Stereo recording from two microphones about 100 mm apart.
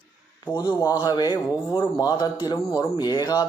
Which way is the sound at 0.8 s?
35° left (ahead or behind).